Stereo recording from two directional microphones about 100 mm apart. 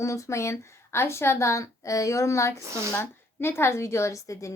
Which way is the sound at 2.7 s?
30° right (ahead or behind).